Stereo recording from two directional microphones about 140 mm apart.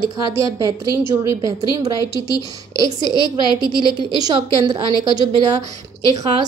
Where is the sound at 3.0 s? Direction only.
30° left (ahead or behind).